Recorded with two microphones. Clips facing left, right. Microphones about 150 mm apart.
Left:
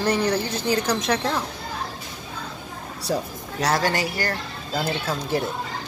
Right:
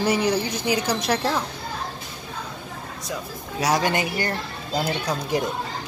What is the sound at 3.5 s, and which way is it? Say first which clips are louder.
Speech: right 1 dB; 15° right (ahead or behind).